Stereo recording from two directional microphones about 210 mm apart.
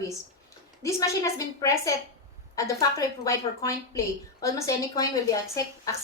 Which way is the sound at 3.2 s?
15° left (ahead or behind).